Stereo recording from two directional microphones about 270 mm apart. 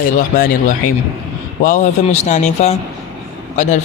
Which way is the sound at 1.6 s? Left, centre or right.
Left.